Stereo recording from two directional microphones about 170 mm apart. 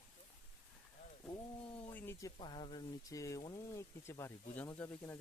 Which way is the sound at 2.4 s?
30° left (ahead or behind).